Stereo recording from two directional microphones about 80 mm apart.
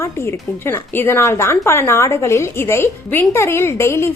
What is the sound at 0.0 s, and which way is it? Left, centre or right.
A woman's voice, left.